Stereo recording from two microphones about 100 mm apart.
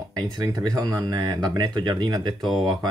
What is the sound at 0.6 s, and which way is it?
Speech, 45° right (ahead or behind).